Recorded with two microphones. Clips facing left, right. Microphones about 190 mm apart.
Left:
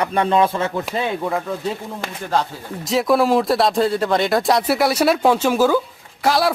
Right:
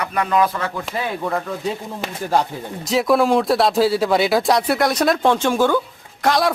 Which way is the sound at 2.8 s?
Centre (ahead or behind).